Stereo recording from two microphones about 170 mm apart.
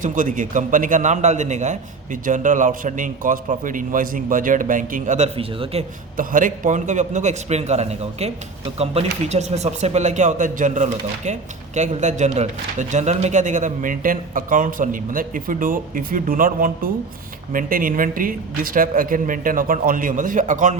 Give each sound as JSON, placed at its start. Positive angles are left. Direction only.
{"t": 0.0, "sound": "a man's voice", "side_deg": -50}
{"t": 6.1, "sound": "a man's voice", "side_deg": -50}